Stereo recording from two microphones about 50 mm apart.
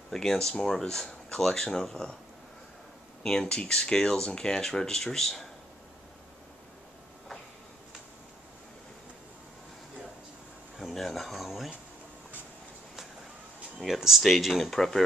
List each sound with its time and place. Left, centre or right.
0.1 s speech: centre
3.3 s speech: centre
10.8 s a sound: centre
13.7 s speech: centre